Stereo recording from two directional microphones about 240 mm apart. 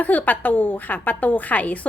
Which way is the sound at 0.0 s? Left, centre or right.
Centre.